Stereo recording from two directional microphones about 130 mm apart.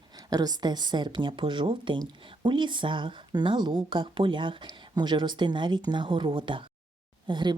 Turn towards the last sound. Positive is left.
turn(degrees=-35)  # may be behind; listen again after turning